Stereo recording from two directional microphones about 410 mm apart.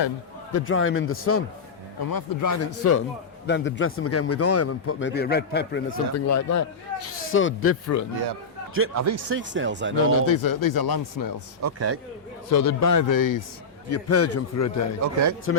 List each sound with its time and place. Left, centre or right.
0.5 s a man's voice: left
2.0 s speech: left
3.4 s speech: left
6.1 s a man's voice: left
8.7 s speech: right
10.2 s speech: left
11.6 s a man's voice: right
12.5 s speech: left
13.9 s a man's voice: left
15.0 s a man's voice: right